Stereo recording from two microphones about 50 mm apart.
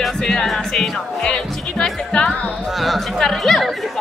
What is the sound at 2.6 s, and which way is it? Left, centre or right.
Speech, centre.